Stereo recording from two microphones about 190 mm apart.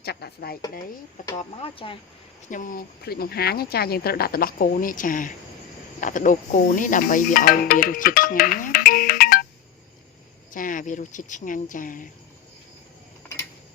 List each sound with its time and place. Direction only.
0.0 s a woman's voice: 55° left (ahead or behind)
1.4 s speech: 30° left (ahead or behind)
2.5 s speech: 45° left (ahead or behind)
10.5 s speech: 45° left (ahead or behind)